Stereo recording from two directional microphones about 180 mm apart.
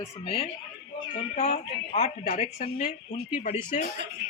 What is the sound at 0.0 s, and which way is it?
A man's voice, 35° left (ahead or behind).